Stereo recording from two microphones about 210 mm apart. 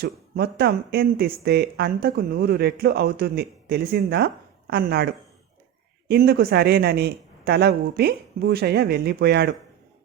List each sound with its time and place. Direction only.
0.0 s speech: 50° right (ahead or behind)
6.1 s speech: 50° right (ahead or behind)